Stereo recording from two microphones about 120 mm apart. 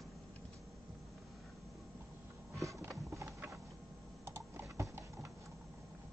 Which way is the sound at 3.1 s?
25° right (ahead or behind).